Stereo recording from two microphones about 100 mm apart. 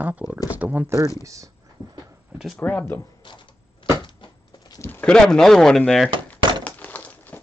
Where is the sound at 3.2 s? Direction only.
55° left (ahead or behind).